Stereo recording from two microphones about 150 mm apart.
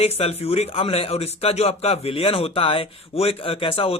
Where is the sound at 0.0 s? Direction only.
40° left (ahead or behind).